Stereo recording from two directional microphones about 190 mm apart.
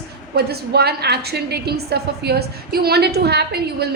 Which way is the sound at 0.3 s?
55° right (ahead or behind).